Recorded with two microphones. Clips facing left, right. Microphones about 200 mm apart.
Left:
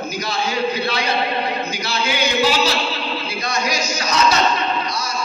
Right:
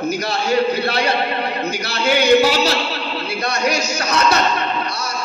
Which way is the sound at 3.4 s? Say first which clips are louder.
Right 4 dB; 65° right (ahead or behind).